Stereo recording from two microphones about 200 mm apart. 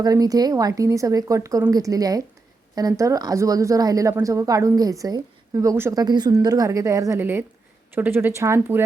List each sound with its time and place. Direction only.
0.0 s a woman's voice: 15° right (ahead or behind)